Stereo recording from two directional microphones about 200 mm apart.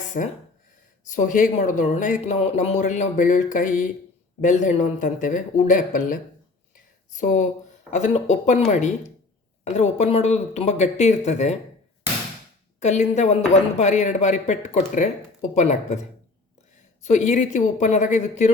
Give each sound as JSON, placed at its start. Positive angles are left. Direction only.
{"t": 0.1, "sound": "speech", "side_deg": 35}
{"t": 12.8, "sound": "speech", "side_deg": 35}
{"t": 17.0, "sound": "speech", "side_deg": 35}